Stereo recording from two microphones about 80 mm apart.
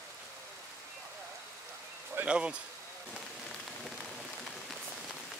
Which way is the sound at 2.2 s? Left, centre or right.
Centre.